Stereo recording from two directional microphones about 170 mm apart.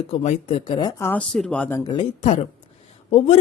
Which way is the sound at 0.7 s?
25° left (ahead or behind).